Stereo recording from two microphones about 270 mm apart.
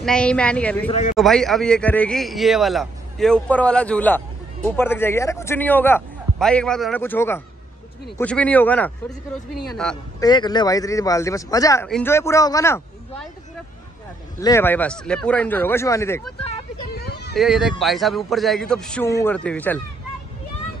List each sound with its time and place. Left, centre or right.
0.0 s a man's voice: centre
0.8 s speech: left
1.1 s a man's voice: centre
10.2 s speech: centre
14.4 s speech: centre
16.9 s a sound: left
17.4 s a man's voice: centre